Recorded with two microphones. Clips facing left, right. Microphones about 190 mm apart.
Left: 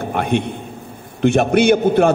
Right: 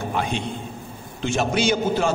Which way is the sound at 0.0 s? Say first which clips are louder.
Left 6 dB; 60° left (ahead or behind).